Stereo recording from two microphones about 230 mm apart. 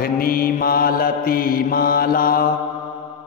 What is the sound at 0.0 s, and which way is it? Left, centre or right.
Mantra, left.